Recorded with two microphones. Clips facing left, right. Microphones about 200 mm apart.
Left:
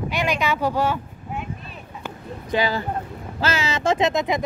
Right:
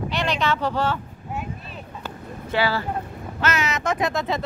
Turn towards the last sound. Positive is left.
turn(degrees=15)  # may be behind; listen again after turning